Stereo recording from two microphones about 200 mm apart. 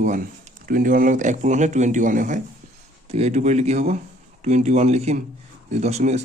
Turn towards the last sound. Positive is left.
turn(degrees=-35)  # may be behind; listen again after turning